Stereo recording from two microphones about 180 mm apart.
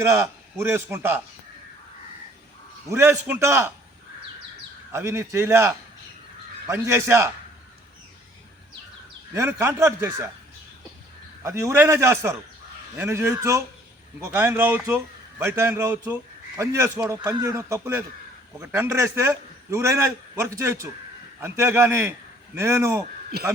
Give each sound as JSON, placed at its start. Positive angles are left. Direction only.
{"t": 0.0, "sound": "a man's voice", "side_deg": -15}
{"t": 2.9, "sound": "a man's voice", "side_deg": -15}
{"t": 4.9, "sound": "a man's voice", "side_deg": -15}
{"t": 9.3, "sound": "a man's voice", "side_deg": -15}
{"t": 11.4, "sound": "a man's voice", "side_deg": -15}
{"t": 23.3, "sound": "a man's voice", "side_deg": -60}